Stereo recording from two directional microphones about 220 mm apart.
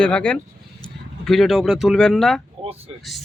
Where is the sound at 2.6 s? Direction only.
25° right (ahead or behind).